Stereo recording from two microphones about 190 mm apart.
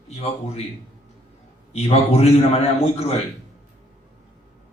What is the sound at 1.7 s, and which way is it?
A man's voice, 35° left (ahead or behind).